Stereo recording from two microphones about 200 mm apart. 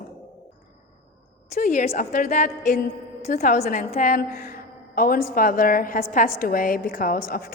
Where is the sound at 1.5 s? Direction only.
40° left (ahead or behind).